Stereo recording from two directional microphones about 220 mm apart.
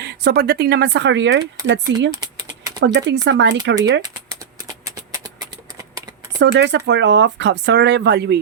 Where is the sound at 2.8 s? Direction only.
55° right (ahead or behind).